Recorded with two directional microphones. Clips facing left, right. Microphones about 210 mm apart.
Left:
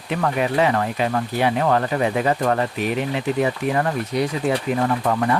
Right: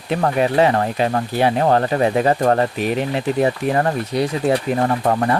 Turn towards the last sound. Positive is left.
turn(degrees=-35)  # may be behind; listen again after turning